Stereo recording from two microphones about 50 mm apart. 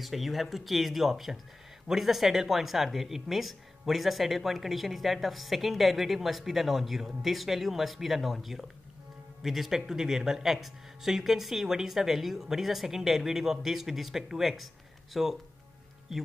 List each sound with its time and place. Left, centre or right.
0.0 s speech: centre